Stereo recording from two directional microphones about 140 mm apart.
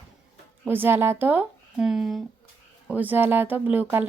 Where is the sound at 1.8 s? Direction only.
5° right (ahead or behind).